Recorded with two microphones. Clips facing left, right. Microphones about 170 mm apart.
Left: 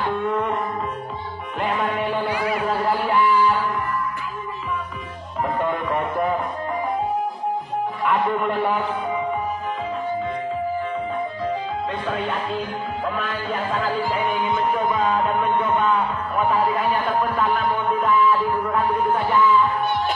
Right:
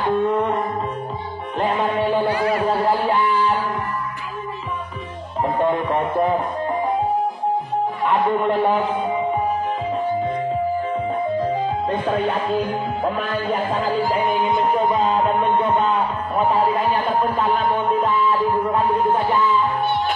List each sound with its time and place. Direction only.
0.0 s music: 25° right (ahead or behind)
1.6 s music: 25° right (ahead or behind)
2.3 s music: 10° left (ahead or behind)
2.6 s music: 30° right (ahead or behind)
5.4 s music: 25° right (ahead or behind)
8.1 s music: 25° right (ahead or behind)
11.9 s music: 45° right (ahead or behind); by 19.6 s 25° right (ahead or behind)